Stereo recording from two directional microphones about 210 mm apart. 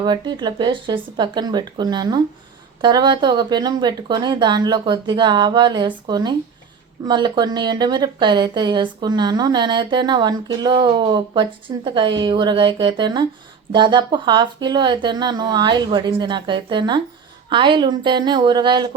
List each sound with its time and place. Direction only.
0.0 s a woman's voice: 20° right (ahead or behind)